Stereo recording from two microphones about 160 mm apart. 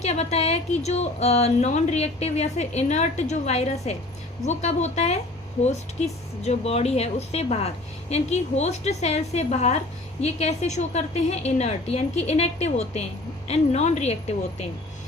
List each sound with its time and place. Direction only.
0.0 s a woman's voice: 45° left (ahead or behind)